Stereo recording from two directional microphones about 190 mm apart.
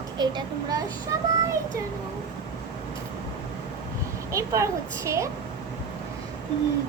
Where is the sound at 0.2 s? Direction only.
20° right (ahead or behind).